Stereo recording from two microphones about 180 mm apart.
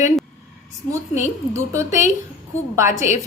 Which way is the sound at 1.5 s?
15° right (ahead or behind).